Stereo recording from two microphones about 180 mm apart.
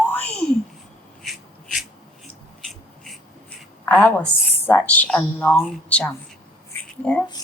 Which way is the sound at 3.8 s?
10° left (ahead or behind).